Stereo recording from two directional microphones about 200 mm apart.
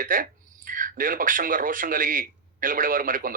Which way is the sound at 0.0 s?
45° right (ahead or behind).